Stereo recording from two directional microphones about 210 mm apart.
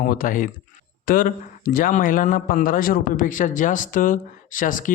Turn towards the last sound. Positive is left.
turn(degrees=40)  # may be behind; listen again after turning